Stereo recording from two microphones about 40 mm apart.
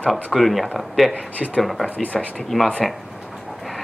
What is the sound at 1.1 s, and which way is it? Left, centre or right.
Speech, left.